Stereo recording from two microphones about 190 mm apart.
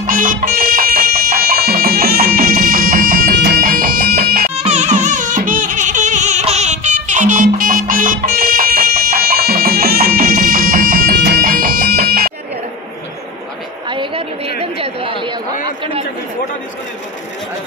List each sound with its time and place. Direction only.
0.0 s music: 45° right (ahead or behind)
4.6 s music: 40° right (ahead or behind)
13.8 s a sound: 25° right (ahead or behind)
14.6 s chatter: 30° right (ahead or behind)